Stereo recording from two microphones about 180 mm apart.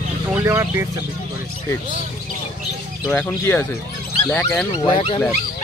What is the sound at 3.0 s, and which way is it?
Speech, 10° left (ahead or behind).